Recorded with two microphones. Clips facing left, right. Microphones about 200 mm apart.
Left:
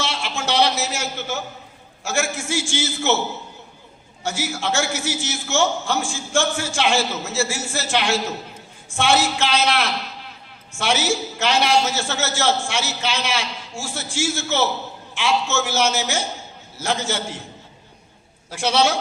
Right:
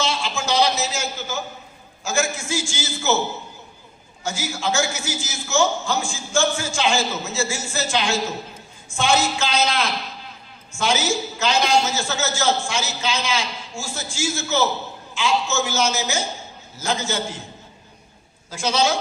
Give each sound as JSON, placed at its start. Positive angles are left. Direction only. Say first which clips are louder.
{"t": 0.0, "sound": "a sound", "louder": "right 1 dB", "side_deg": 65}
{"t": 2.0, "sound": "a man's voice", "louder": "even", "side_deg": 70}
{"t": 4.2, "sound": "a man's voice", "louder": "left 1 dB", "side_deg": 70}
{"t": 18.6, "sound": "a man's voice", "louder": "left 2 dB", "side_deg": 65}